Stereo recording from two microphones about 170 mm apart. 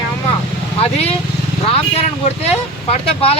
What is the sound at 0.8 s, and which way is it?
Speech, 35° left (ahead or behind).